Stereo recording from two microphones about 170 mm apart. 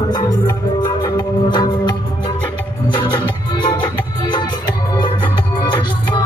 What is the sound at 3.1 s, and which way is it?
Music, 30° left (ahead or behind).